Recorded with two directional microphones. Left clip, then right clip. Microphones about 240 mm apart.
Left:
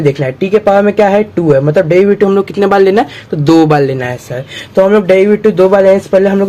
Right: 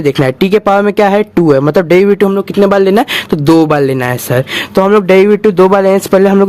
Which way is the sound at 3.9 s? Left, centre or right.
Right.